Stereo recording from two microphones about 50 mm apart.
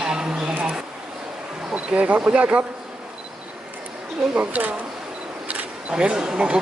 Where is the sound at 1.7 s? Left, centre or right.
Right.